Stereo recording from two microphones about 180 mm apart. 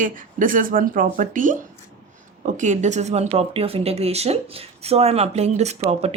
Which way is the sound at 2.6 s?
40° right (ahead or behind).